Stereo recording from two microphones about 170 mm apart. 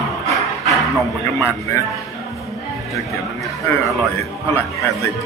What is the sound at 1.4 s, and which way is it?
Speech, 15° left (ahead or behind).